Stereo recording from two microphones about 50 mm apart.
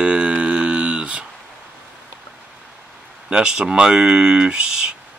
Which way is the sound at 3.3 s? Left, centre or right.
Centre.